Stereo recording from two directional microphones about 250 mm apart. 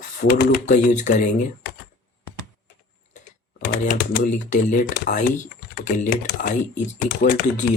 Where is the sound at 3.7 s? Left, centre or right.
Left.